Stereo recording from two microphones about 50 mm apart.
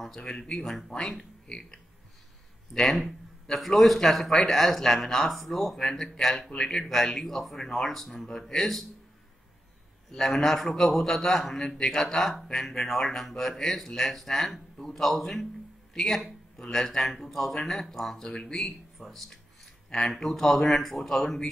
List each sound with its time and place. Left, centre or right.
0.0 s a man's voice: centre
10.1 s a man's voice: centre
18.6 s speech: centre